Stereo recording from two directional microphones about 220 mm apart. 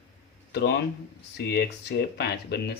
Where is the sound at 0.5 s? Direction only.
50° left (ahead or behind).